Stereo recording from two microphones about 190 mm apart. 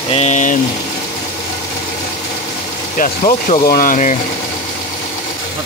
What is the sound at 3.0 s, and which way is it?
Speech, 45° left (ahead or behind).